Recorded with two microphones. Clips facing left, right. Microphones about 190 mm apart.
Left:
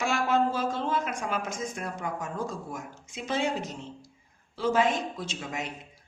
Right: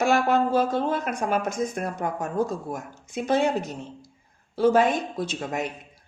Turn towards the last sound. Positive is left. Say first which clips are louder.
# right 7 dB
turn(degrees=-55)  # may be behind; listen again after turning